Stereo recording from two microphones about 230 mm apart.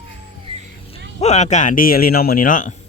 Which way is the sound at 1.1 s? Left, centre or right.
Left.